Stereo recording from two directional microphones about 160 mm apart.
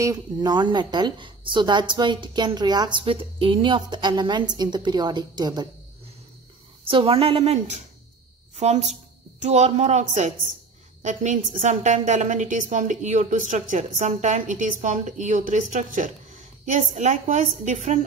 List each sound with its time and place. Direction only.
0.0 s a woman's voice: 25° right (ahead or behind)
6.9 s a woman's voice: 35° right (ahead or behind)